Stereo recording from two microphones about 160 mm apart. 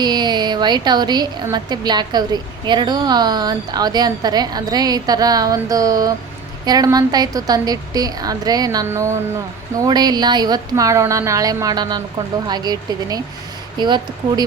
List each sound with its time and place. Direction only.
0.0 s a woman's voice: 25° right (ahead or behind)